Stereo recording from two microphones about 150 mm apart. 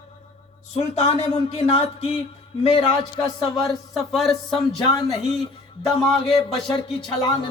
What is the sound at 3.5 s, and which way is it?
Speech, centre (ahead or behind).